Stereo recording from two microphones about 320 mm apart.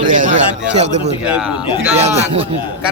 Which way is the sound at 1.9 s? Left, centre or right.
Centre.